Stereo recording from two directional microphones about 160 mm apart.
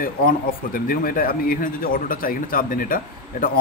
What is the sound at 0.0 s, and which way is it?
A man's voice, 60° left (ahead or behind).